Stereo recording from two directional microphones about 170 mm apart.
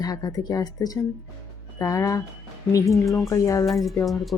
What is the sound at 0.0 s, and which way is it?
Speech, 20° left (ahead or behind).